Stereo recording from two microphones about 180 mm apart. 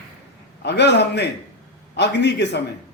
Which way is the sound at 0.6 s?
70° left (ahead or behind).